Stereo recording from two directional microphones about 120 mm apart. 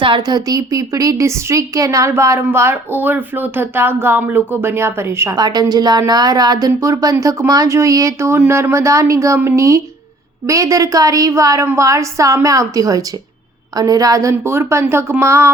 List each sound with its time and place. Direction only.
0.0 s a woman's voice: 40° right (ahead or behind); by 5.4 s 20° right (ahead or behind)
5.4 s a woman's voice: 35° right (ahead or behind)